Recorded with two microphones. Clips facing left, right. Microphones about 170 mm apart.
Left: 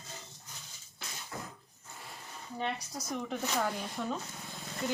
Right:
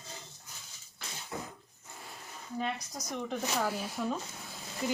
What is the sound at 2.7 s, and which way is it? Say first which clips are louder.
Speech: left 1 dB; 10° left (ahead or behind).